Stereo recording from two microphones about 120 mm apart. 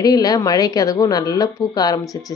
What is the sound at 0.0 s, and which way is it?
Speech, 30° left (ahead or behind).